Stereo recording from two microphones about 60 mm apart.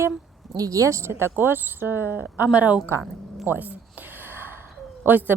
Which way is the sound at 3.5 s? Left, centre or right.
Right.